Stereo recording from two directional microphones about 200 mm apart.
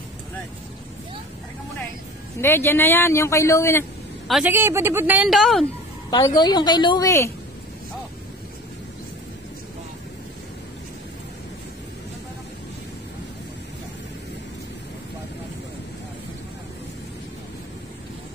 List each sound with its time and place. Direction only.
2.4 s speech: 10° left (ahead or behind)
4.3 s a woman's voice: 5° right (ahead or behind)
6.0 s a woman's voice: 20° left (ahead or behind)